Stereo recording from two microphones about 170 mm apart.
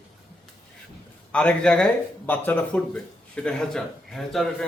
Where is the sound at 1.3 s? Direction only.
5° left (ahead or behind).